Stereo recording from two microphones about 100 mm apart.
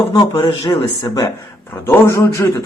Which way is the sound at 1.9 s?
30° left (ahead or behind).